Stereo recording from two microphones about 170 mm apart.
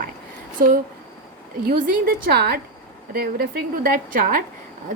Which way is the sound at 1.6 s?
60° right (ahead or behind).